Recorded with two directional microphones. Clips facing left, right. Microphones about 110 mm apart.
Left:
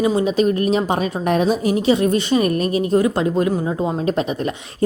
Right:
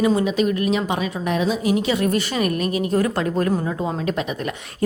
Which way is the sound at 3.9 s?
30° left (ahead or behind).